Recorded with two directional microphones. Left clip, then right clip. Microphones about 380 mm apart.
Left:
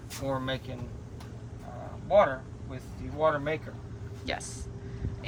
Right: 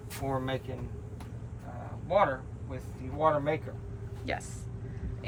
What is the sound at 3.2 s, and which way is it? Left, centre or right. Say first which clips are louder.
Speech: even; centre.